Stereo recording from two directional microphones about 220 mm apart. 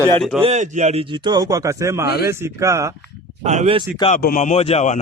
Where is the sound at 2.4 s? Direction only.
15° right (ahead or behind).